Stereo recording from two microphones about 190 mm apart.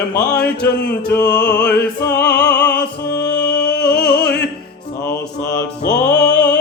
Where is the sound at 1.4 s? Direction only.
60° left (ahead or behind).